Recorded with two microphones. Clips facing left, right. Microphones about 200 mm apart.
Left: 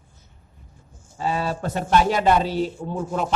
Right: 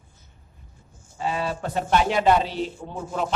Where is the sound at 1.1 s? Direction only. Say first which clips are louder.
Left 2 dB; 40° left (ahead or behind).